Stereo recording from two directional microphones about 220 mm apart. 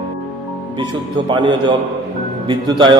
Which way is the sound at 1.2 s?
20° right (ahead or behind).